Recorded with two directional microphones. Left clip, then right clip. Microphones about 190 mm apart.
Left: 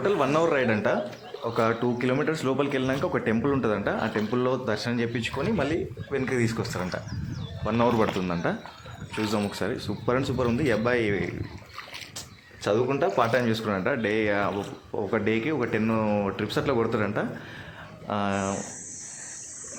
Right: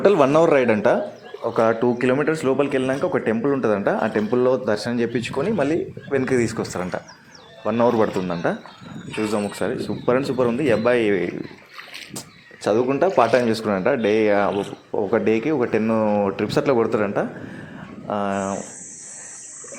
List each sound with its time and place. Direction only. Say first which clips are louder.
0.0 s speech: right 8 dB; 30° right (ahead or behind)
1.5 s speech: right 7 dB; 15° right (ahead or behind)
3.6 s speech: right 6 dB; 20° right (ahead or behind)
12.6 s speech: right 5 dB; 20° right (ahead or behind)